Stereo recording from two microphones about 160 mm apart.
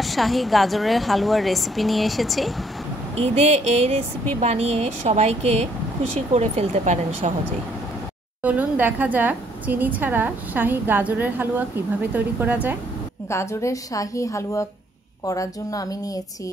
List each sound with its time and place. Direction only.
0.0 s speech: centre (ahead or behind)
3.2 s speech: 40° right (ahead or behind)
8.4 s a woman's voice: 10° right (ahead or behind)
13.3 s a woman's voice: 15° left (ahead or behind)